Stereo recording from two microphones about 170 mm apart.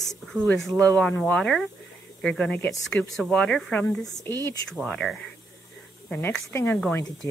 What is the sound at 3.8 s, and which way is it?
Speech, 15° left (ahead or behind).